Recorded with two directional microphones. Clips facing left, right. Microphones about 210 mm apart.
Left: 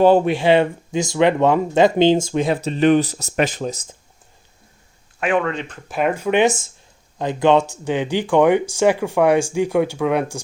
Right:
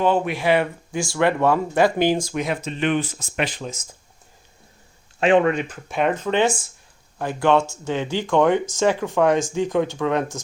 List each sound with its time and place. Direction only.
0.0 s speech: 35° left (ahead or behind)
5.2 s speech: 25° right (ahead or behind)
5.5 s speech: 5° right (ahead or behind)
6.0 s speech: 10° left (ahead or behind)